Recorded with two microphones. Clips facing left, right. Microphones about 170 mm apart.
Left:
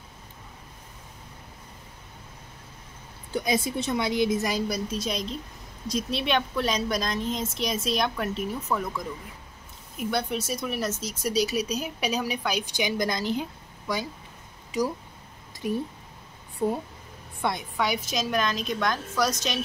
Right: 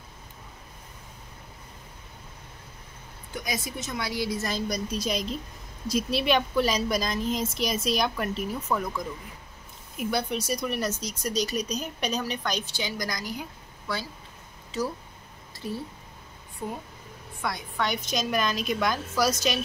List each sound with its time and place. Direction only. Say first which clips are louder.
3.3 s a woman's voice: left 7 dB; 25° left (ahead or behind)
17.4 s a woman's voice: left 4 dB; 25° left (ahead or behind)
17.7 s a woman's voice: left 1 dB; 10° left (ahead or behind)